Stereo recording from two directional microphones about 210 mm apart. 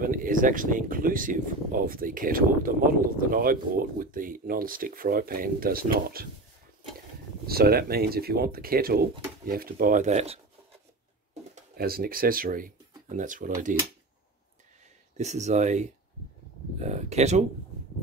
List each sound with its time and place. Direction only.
0.0 s speech: 40° right (ahead or behind)
7.4 s speech: 45° right (ahead or behind); by 10.4 s 30° right (ahead or behind)
11.7 s speech: 45° right (ahead or behind)
15.1 s speech: 35° right (ahead or behind)